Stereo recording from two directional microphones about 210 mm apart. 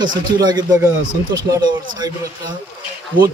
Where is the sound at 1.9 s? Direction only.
20° right (ahead or behind).